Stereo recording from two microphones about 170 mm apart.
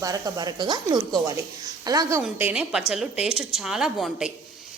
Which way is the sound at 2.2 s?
5° right (ahead or behind).